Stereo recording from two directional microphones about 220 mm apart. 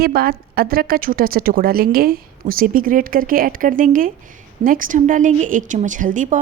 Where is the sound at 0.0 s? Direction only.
45° right (ahead or behind).